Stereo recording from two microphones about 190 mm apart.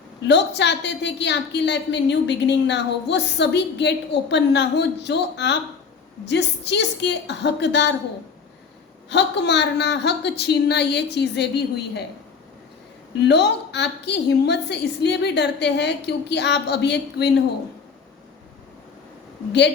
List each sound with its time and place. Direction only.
0.3 s a woman's voice: 65° left (ahead or behind)
9.0 s a woman's voice: 65° left (ahead or behind)
13.1 s a woman's voice: 60° left (ahead or behind)